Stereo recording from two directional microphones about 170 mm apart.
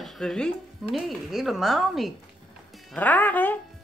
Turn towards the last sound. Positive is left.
turn(degrees=10)  # may be behind; listen again after turning